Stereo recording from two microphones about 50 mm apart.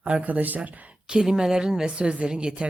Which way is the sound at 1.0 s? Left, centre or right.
Centre.